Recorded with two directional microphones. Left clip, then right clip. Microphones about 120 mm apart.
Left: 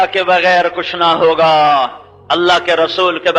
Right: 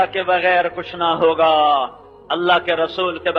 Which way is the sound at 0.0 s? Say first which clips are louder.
Left 5 dB; 40° right (ahead or behind).